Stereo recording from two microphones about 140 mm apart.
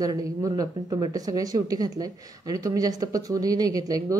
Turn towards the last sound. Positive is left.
turn(degrees=-25)  # may be behind; listen again after turning